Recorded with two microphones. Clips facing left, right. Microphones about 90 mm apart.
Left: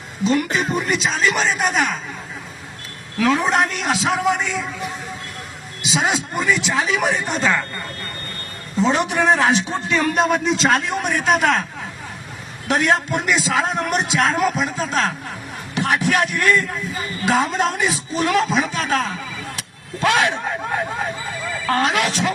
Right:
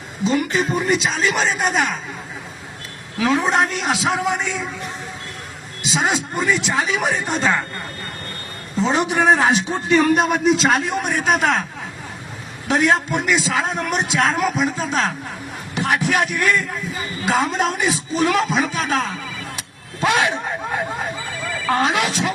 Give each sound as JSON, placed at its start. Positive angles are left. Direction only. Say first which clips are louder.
{"t": 0.3, "sound": "a man's voice", "louder": "even", "side_deg": 0}
{"t": 3.2, "sound": "a man's voice", "louder": "even", "side_deg": 0}
{"t": 8.7, "sound": "a man's voice", "louder": "even", "side_deg": 0}
{"t": 12.6, "sound": "a man's voice", "louder": "right 1 dB", "side_deg": 0}
{"t": 20.0, "sound": "speech", "louder": "left 1 dB", "side_deg": -15}